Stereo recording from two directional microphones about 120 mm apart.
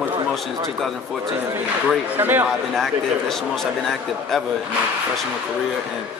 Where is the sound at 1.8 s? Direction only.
15° right (ahead or behind).